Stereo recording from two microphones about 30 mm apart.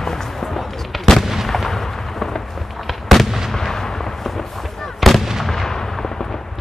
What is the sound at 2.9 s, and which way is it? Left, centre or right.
Fireworks, centre.